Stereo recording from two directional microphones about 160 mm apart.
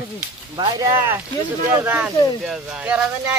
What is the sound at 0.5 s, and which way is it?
Speech, 30° right (ahead or behind).